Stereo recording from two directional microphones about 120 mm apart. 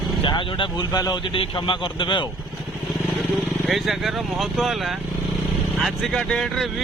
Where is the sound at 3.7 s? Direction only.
Centre (ahead or behind).